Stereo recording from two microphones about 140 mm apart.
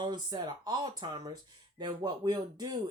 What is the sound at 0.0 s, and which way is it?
Speech, 30° right (ahead or behind).